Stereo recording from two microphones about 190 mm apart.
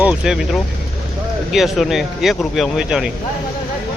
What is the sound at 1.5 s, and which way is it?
Speech, centre (ahead or behind).